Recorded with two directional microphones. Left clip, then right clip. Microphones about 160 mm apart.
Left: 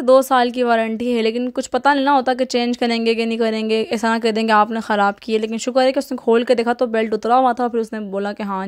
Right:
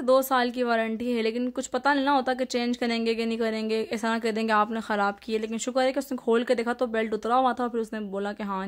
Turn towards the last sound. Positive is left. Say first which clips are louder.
# left 8 dB
turn(degrees=30)  # may be behind; listen again after turning